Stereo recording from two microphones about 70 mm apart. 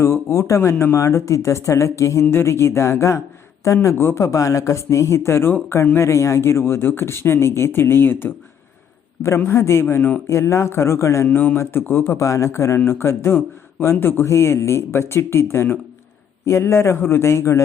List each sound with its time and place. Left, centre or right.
0.0 s speech: left
9.5 s speech: left
11.3 s speech: centre
11.5 s speech: left
12.1 s speech: left